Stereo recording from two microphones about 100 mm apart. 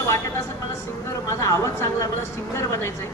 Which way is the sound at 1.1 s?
30° left (ahead or behind).